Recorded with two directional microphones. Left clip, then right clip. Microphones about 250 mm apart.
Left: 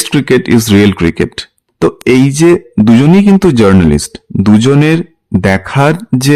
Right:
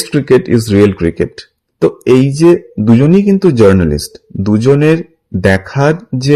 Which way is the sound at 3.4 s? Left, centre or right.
Left.